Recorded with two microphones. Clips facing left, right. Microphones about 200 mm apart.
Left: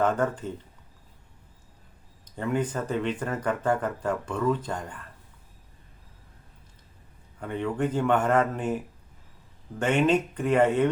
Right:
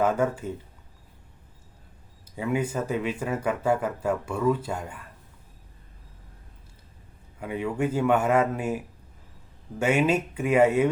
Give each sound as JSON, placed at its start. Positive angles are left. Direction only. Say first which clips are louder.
{"t": 0.0, "sound": "speech", "louder": "right 1 dB", "side_deg": -10}
{"t": 2.2, "sound": "speech", "louder": "even", "side_deg": -10}
{"t": 7.3, "sound": "speech", "louder": "even", "side_deg": -10}